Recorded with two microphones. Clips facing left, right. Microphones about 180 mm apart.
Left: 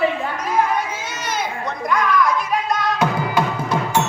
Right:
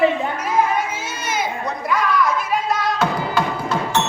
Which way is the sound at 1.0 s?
10° right (ahead or behind).